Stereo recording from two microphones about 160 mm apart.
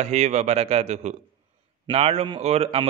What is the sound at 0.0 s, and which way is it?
A man's voice, 45° right (ahead or behind).